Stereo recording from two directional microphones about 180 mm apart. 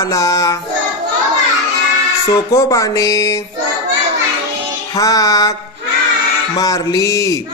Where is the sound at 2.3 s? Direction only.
15° left (ahead or behind).